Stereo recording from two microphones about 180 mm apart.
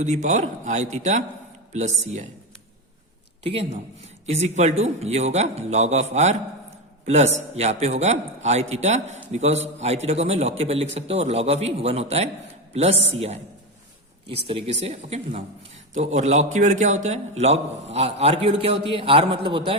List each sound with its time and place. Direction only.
0.0 s a man's voice: 40° right (ahead or behind)
3.4 s a man's voice: 35° right (ahead or behind)